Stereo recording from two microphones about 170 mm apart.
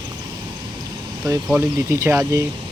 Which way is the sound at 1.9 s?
15° right (ahead or behind).